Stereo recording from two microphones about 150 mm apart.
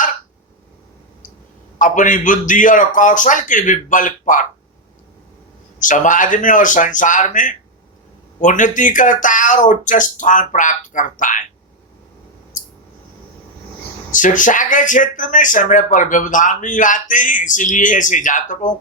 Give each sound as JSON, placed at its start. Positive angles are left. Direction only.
{"t": 1.8, "sound": "speech", "side_deg": 60}
{"t": 5.8, "sound": "speech", "side_deg": 60}
{"t": 12.5, "sound": "a sound", "side_deg": 60}
{"t": 14.1, "sound": "speech", "side_deg": 60}